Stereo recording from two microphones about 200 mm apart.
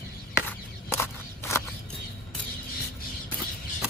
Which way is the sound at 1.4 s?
15° left (ahead or behind).